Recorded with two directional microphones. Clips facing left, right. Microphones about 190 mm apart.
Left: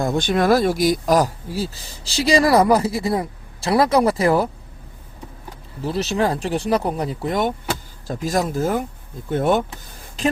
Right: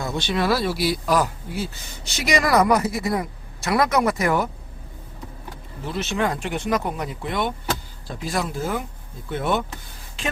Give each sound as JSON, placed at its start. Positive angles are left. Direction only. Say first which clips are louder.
{"t": 0.0, "sound": "speech", "louder": "left 5 dB", "side_deg": 50}
{"t": 5.8, "sound": "speech", "louder": "left 4 dB", "side_deg": 35}